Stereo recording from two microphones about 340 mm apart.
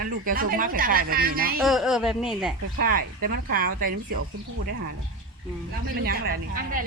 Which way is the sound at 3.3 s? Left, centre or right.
Right.